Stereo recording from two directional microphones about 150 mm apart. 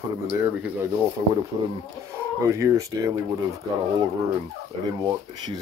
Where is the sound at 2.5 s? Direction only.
20° right (ahead or behind).